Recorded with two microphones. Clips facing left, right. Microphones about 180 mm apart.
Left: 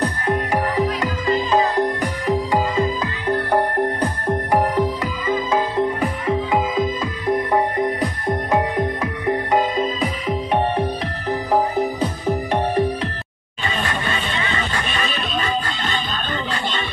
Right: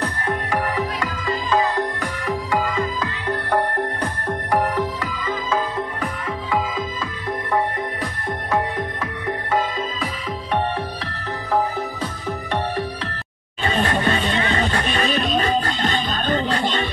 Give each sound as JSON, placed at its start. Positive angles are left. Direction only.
{"t": 0.3, "sound": "music", "side_deg": 20}
{"t": 13.8, "sound": "music", "side_deg": -50}
{"t": 14.8, "sound": "music", "side_deg": -40}